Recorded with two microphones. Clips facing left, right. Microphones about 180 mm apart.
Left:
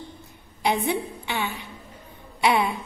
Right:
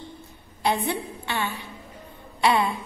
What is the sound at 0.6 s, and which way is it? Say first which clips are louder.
A woman's voice: left 1 dB; 15° left (ahead or behind).